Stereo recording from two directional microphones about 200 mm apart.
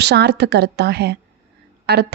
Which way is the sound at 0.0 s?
55° right (ahead or behind).